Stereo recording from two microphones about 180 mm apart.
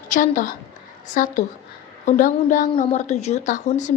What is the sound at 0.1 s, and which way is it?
A woman's voice, 45° left (ahead or behind).